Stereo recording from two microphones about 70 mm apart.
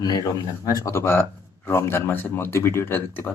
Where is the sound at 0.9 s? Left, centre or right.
Left.